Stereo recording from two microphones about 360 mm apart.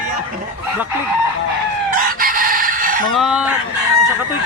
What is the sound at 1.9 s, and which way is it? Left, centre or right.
Chicken, right.